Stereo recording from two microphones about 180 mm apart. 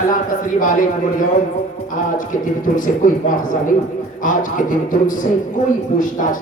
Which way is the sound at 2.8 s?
45° left (ahead or behind).